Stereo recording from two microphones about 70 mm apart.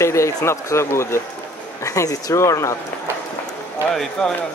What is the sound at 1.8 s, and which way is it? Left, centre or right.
Speech, left.